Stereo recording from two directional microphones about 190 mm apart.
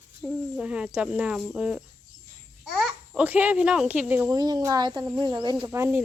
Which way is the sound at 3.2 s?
10° right (ahead or behind).